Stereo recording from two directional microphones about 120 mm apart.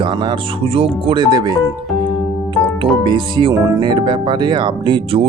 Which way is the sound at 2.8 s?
40° right (ahead or behind).